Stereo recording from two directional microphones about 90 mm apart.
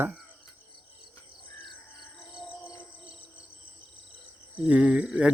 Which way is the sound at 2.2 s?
5° right (ahead or behind).